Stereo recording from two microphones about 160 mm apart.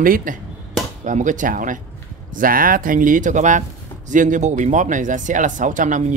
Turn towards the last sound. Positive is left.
turn(degrees=-55)  # may be behind; listen again after turning